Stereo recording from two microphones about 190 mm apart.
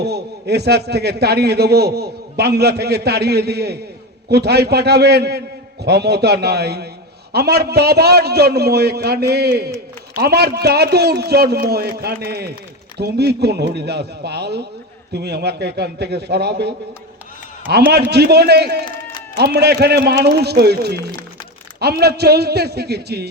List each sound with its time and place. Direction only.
0.0 s a man's voice: 60° right (ahead or behind)